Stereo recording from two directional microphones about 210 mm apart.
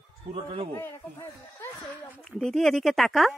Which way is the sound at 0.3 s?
25° right (ahead or behind).